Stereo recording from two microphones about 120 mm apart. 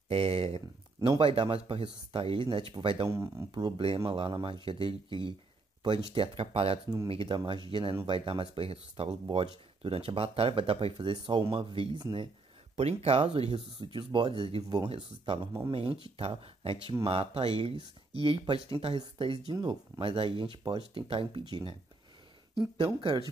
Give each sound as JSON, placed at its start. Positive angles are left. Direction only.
{"t": 0.1, "sound": "speech", "side_deg": -55}
{"t": 3.1, "sound": "speech", "side_deg": -25}
{"t": 3.5, "sound": "speech", "side_deg": -45}
{"t": 12.7, "sound": "speech", "side_deg": -55}
{"t": 19.5, "sound": "speech", "side_deg": -35}
{"t": 20.0, "sound": "speech", "side_deg": -50}
{"t": 22.9, "sound": "speech", "side_deg": -40}